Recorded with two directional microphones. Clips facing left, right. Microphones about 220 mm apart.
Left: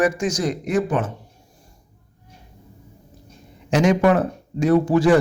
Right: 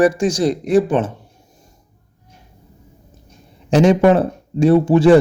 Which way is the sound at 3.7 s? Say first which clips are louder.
Right 5 dB; 30° right (ahead or behind).